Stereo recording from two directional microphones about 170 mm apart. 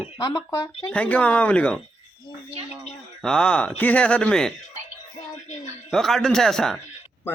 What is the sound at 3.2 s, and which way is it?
Speech, 5° left (ahead or behind).